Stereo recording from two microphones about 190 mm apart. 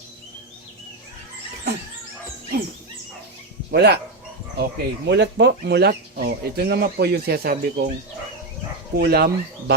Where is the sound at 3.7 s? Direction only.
60° right (ahead or behind).